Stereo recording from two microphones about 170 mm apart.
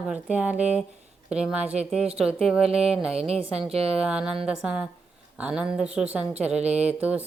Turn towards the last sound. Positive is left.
turn(degrees=-10)  # may be behind; listen again after turning